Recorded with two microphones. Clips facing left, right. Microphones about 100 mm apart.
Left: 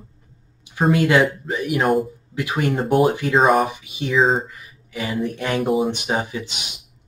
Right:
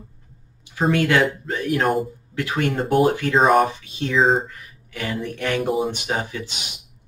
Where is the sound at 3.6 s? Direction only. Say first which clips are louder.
Even; 15° left (ahead or behind).